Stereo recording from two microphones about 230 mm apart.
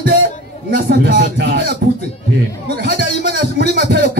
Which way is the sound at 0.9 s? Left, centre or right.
Right.